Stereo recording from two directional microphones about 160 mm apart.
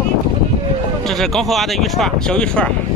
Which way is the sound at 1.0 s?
Centre (ahead or behind).